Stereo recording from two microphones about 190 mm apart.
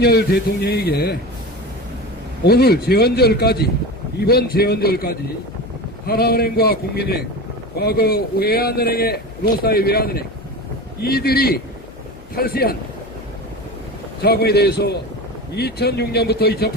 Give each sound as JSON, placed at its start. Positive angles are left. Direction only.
{"t": 0.0, "sound": "a man's voice", "side_deg": 55}
{"t": 2.4, "sound": "a man's voice", "side_deg": 55}
{"t": 14.2, "sound": "a man's voice", "side_deg": 55}